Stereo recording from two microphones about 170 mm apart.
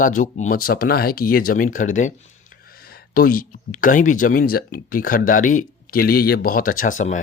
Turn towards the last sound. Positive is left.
turn(degrees=50)  # may be behind; listen again after turning